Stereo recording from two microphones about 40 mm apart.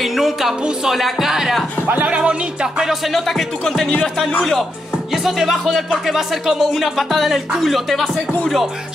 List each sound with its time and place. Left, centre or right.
0.0 s speech: centre
2.0 s speech: right
3.1 s speech: centre
5.1 s speech: centre
6.6 s speech: centre